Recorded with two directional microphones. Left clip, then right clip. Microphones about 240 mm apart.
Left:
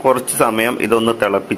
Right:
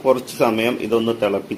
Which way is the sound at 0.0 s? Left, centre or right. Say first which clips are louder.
Left 3 dB; centre.